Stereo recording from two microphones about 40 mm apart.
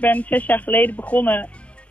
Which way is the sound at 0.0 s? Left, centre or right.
Left.